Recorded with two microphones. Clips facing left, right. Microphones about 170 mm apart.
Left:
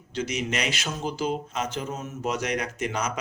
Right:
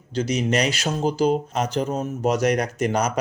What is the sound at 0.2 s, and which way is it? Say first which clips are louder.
Speech: right 7 dB; 35° right (ahead or behind).